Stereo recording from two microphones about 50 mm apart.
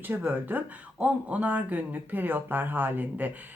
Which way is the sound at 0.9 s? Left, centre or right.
Right.